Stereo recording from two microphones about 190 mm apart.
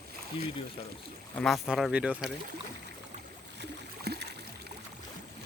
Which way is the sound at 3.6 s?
60° right (ahead or behind).